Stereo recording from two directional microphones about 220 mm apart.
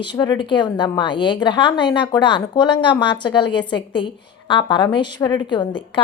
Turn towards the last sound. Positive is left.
turn(degrees=20)  # may be behind; listen again after turning